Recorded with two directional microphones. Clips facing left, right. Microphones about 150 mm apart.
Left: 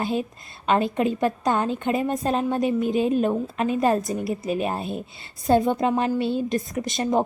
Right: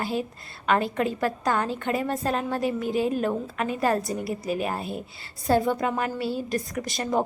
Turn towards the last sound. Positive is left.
turn(degrees=20)  # may be behind; listen again after turning